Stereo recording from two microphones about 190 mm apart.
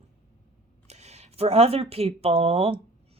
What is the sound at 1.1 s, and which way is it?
Speech, 30° right (ahead or behind).